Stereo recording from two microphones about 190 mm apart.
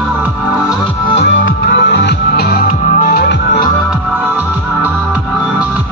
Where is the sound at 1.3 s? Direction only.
65° left (ahead or behind); by 3.3 s 50° left (ahead or behind).